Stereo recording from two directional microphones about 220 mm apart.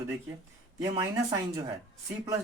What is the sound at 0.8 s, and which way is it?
Speech, 15° right (ahead or behind).